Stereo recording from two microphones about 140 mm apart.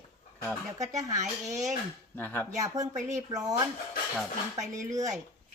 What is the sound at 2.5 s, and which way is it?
Speech, 25° right (ahead or behind).